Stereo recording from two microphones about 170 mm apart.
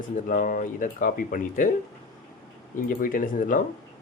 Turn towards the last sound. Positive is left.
turn(degrees=50)  # may be behind; listen again after turning